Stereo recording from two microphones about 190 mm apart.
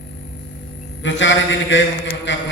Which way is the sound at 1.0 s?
75° left (ahead or behind).